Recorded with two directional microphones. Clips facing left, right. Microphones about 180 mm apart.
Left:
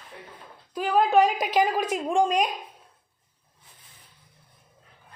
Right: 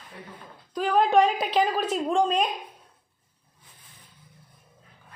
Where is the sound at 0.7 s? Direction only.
5° left (ahead or behind).